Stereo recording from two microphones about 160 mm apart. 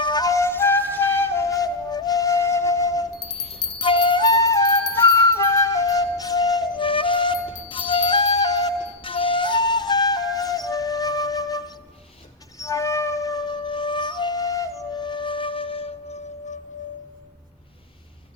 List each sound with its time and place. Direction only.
0.0 s flute: 25° left (ahead or behind)
3.4 s flute: 35° left (ahead or behind)
12.5 s music: 20° left (ahead or behind); by 15.9 s 35° left (ahead or behind)